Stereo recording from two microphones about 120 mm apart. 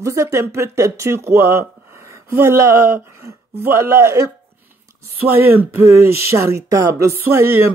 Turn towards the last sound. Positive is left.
turn(degrees=-20)  # may be behind; listen again after turning